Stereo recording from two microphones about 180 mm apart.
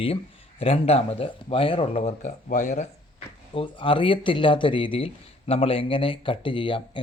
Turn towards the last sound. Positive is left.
turn(degrees=25)  # may be behind; listen again after turning